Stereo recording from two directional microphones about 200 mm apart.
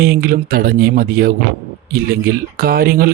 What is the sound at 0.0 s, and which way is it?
Speech, 45° right (ahead or behind).